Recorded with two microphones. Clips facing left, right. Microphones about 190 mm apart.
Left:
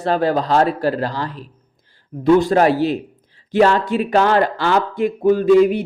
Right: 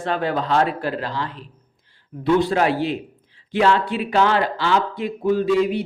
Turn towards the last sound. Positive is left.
turn(degrees=50)  # may be behind; listen again after turning